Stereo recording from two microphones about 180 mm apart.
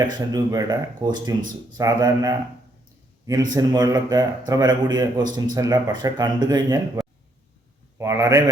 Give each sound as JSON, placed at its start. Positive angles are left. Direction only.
{"t": 0.1, "sound": "a man's voice", "side_deg": -20}